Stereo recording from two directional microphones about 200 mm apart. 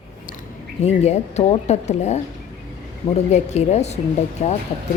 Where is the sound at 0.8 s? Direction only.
35° left (ahead or behind).